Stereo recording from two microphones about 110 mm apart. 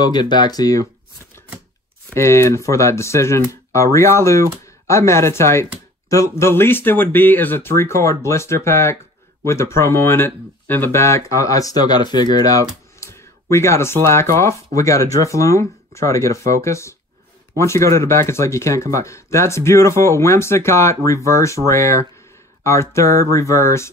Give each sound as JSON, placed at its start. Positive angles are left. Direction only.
{"t": 0.0, "sound": "speech", "side_deg": 40}
{"t": 2.1, "sound": "speech", "side_deg": 25}